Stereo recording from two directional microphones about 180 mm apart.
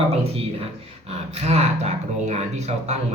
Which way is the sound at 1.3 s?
35° right (ahead or behind).